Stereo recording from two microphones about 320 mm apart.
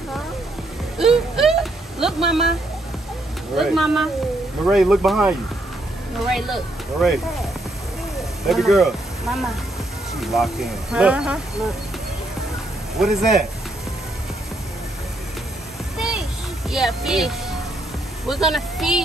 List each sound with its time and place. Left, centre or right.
0.9 s a sound: centre
2.2 s speech: centre
3.5 s speech: centre
8.5 s speech: centre
12.9 s speech: centre
16.0 s a sound: centre
18.2 s speech: centre